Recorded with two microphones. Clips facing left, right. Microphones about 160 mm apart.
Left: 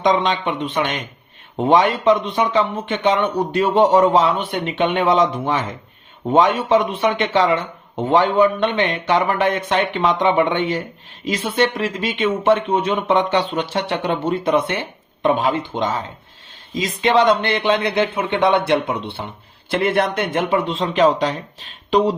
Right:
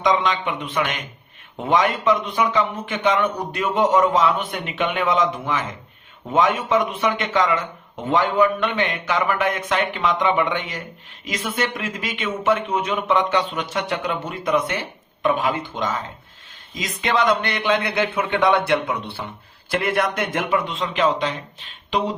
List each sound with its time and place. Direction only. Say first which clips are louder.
0.0 s speech: left 3 dB; 30° left (ahead or behind)